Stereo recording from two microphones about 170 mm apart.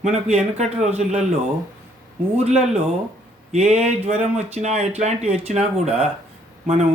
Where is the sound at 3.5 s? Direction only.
40° right (ahead or behind).